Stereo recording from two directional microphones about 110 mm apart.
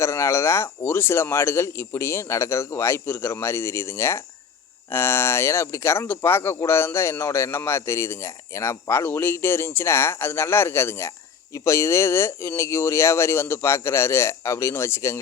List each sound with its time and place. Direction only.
0.0 s speech: 25° left (ahead or behind)